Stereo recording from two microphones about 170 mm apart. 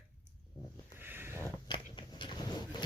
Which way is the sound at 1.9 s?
30° left (ahead or behind).